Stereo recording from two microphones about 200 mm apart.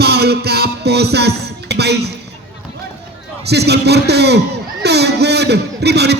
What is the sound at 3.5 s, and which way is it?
A man's voice, 55° right (ahead or behind).